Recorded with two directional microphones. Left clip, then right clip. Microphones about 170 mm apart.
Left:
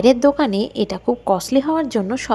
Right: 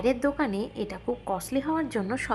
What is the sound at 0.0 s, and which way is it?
A woman's voice, 30° left (ahead or behind).